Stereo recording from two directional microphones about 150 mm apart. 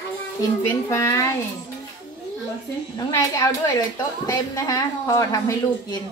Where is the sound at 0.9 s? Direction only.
20° left (ahead or behind).